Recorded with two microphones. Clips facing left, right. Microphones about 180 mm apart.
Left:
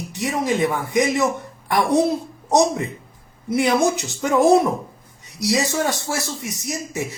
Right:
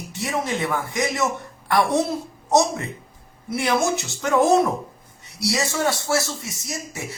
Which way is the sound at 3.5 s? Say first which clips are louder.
Left 4 dB; 15° left (ahead or behind).